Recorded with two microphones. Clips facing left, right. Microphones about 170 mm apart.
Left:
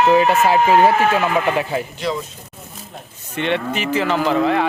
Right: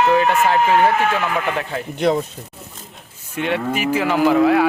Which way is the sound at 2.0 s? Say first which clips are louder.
Right 11 dB; 55° right (ahead or behind).